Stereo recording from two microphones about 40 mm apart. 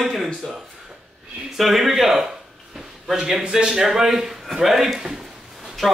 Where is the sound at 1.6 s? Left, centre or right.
Centre.